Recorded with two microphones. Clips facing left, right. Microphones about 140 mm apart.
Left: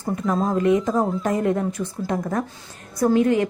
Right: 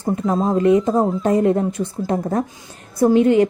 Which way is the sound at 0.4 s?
30° right (ahead or behind).